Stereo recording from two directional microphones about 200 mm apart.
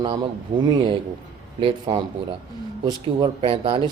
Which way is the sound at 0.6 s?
20° right (ahead or behind).